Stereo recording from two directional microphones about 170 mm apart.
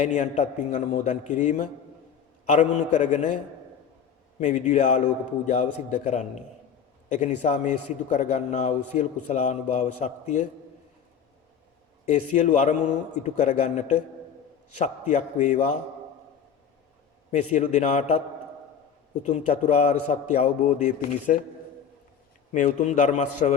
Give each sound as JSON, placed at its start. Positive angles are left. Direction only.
{"t": 0.0, "sound": "a man's voice", "side_deg": 45}
{"t": 4.4, "sound": "a man's voice", "side_deg": 45}
{"t": 12.0, "sound": "a man's voice", "side_deg": 45}
{"t": 15.0, "sound": "a man's voice", "side_deg": 45}
{"t": 17.3, "sound": "a man's voice", "side_deg": 45}
{"t": 19.2, "sound": "a man's voice", "side_deg": 45}
{"t": 22.5, "sound": "a man's voice", "side_deg": 45}